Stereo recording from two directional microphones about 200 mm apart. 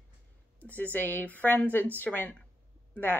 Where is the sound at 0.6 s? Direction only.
10° left (ahead or behind).